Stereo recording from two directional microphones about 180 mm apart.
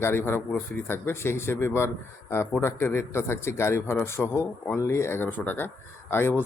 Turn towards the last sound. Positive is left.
turn(degrees=10)  # may be behind; listen again after turning